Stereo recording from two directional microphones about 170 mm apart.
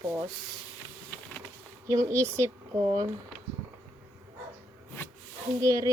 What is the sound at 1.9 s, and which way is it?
Speech, 20° right (ahead or behind).